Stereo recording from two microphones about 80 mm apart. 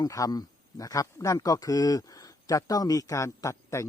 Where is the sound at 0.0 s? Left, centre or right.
Left.